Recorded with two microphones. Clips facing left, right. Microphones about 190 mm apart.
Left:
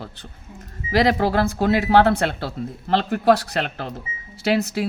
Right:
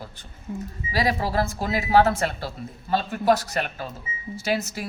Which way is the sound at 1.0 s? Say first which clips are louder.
Left 2 dB; 65° left (ahead or behind).